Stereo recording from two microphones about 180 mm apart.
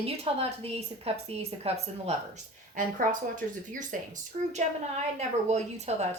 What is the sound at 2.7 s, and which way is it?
A woman's voice, 45° right (ahead or behind).